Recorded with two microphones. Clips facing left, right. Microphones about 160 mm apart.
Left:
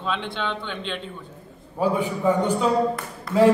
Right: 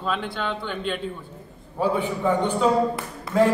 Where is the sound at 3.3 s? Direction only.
Centre (ahead or behind).